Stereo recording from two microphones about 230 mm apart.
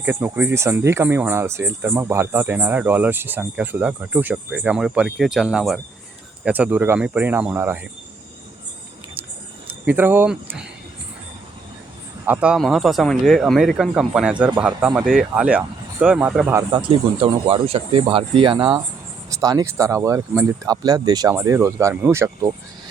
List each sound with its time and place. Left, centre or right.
0.0 s speech: centre
9.6 s speech: centre
12.2 s speech: centre
16.6 s speech: centre